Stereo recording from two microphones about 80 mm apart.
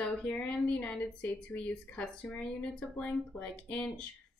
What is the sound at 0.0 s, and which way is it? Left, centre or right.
A woman's voice, centre.